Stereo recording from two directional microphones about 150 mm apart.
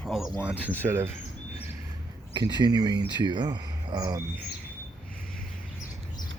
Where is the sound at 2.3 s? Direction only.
30° right (ahead or behind).